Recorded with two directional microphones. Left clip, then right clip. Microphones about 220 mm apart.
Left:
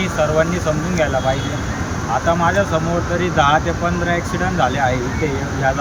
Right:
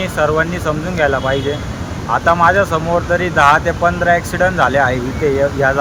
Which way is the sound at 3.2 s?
20° right (ahead or behind).